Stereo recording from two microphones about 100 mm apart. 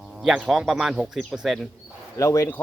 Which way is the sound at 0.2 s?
Centre (ahead or behind).